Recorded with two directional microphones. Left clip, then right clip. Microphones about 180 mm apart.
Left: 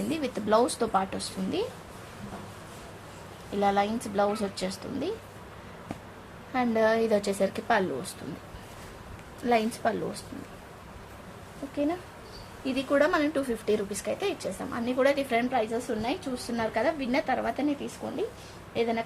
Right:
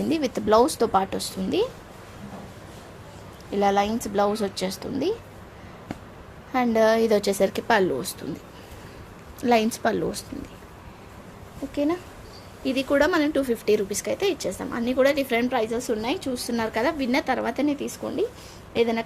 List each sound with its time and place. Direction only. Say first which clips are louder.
0.1 s a woman's voice: right 5 dB; 55° right (ahead or behind)
3.5 s a woman's voice: right 4 dB; 55° right (ahead or behind)
6.5 s speech: right 5 dB; 55° right (ahead or behind)
9.5 s speech: right 5 dB; 45° right (ahead or behind)
12.6 s a woman's voice: right 4 dB; 50° right (ahead or behind)